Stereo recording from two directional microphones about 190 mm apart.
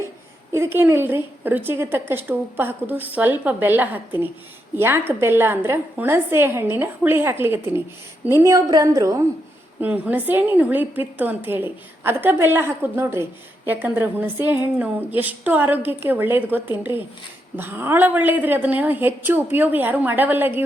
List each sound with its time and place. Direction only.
0.5 s a woman's voice: 15° right (ahead or behind)